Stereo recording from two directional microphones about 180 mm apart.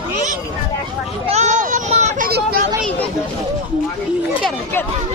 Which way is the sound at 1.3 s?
40° right (ahead or behind).